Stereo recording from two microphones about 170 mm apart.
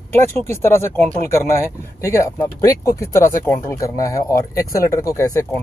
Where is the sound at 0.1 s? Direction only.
15° left (ahead or behind).